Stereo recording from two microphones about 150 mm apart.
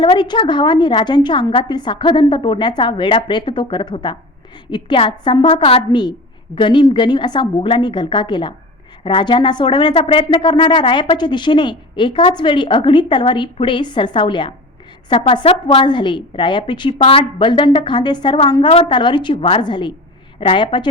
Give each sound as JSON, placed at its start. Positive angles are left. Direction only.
{"t": 0.0, "sound": "a woman's voice", "side_deg": 30}